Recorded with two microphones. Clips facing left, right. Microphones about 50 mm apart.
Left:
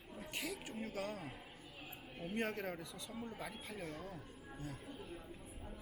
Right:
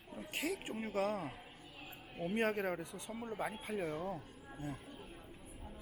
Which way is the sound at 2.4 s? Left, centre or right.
Centre.